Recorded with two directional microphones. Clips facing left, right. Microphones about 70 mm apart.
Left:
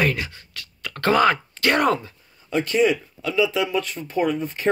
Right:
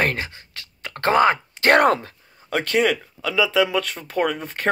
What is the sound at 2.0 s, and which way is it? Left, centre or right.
Speech, right.